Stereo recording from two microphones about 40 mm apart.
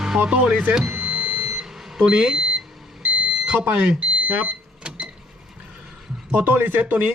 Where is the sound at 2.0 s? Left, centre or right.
Right.